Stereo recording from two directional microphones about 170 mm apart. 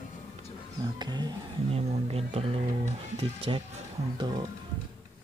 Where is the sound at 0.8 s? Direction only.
25° right (ahead or behind).